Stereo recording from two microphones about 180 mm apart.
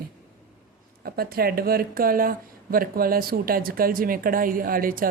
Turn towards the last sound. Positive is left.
turn(degrees=-50)  # may be behind; listen again after turning